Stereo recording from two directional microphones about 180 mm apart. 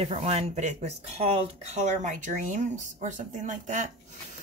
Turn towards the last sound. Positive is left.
turn(degrees=-45)  # may be behind; listen again after turning